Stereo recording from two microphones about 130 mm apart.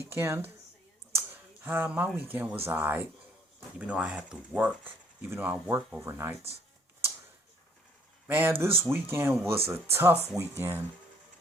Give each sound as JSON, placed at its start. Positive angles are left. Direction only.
{"t": 0.1, "sound": "speech", "side_deg": -20}
{"t": 1.1, "sound": "a sound", "side_deg": -15}
{"t": 2.1, "sound": "speech", "side_deg": -15}
{"t": 8.3, "sound": "speech", "side_deg": -15}